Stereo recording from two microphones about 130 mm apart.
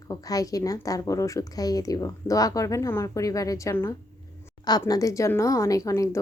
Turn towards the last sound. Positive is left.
turn(degrees=25)  # may be behind; listen again after turning